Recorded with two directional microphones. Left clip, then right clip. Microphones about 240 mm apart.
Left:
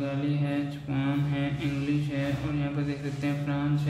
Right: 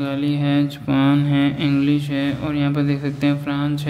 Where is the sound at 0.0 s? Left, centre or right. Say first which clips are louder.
Right 9 dB; right.